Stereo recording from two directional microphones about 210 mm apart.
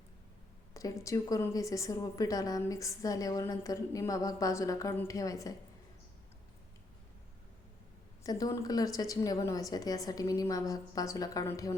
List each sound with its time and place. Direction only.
0.7 s a woman's voice: 15° left (ahead or behind)
8.2 s a woman's voice: 15° left (ahead or behind)